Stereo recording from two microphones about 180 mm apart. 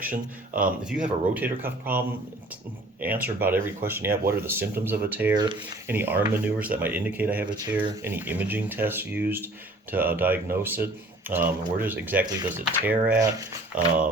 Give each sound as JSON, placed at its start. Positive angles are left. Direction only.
{"t": 0.1, "sound": "speech", "side_deg": -50}
{"t": 1.3, "sound": "speech", "side_deg": -10}
{"t": 3.0, "sound": "speech", "side_deg": -10}
{"t": 5.3, "sound": "speech", "side_deg": -25}
{"t": 5.9, "sound": "speech", "side_deg": -10}
{"t": 12.2, "sound": "speech", "side_deg": -25}
{"t": 12.5, "sound": "speech", "side_deg": -10}
{"t": 13.1, "sound": "speech", "side_deg": -20}
{"t": 13.7, "sound": "speech", "side_deg": -5}